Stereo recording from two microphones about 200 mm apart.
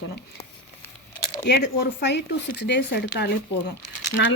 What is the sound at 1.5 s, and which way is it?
Speech, 60° left (ahead or behind).